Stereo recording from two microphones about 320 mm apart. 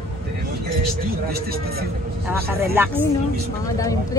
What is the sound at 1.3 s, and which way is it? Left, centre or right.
Speech, right.